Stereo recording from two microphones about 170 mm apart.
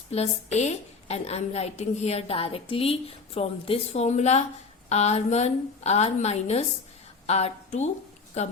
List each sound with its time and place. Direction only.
0.1 s a woman's voice: 40° left (ahead or behind)